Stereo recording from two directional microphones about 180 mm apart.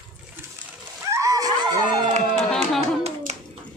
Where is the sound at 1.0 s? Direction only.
15° right (ahead or behind).